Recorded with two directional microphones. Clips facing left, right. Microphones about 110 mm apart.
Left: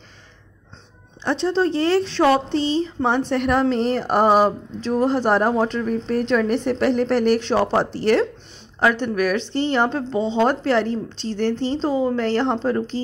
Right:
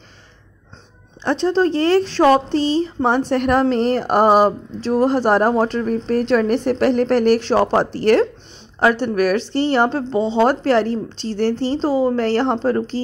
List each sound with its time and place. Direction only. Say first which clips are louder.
1.2 s speech: right 3 dB; 50° right (ahead or behind)
9.9 s a woman's voice: right 3 dB; 35° right (ahead or behind)
10.9 s a woman's voice: right 2 dB; 25° left (ahead or behind)
11.3 s a woman's voice: right 3 dB; 35° right (ahead or behind)